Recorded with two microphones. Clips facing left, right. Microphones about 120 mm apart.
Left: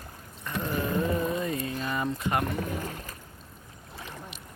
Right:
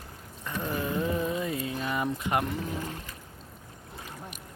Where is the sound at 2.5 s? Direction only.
50° left (ahead or behind).